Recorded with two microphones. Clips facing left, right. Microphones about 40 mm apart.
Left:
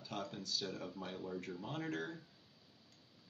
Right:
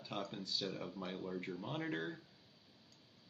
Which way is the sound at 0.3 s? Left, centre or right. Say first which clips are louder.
Right 1 dB; right.